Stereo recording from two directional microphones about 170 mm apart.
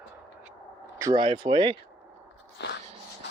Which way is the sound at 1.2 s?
30° right (ahead or behind).